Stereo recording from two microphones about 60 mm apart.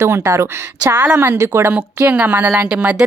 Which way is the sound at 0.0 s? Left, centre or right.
Right.